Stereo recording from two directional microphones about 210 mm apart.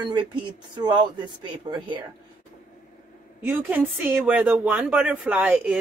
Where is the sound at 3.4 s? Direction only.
10° right (ahead or behind).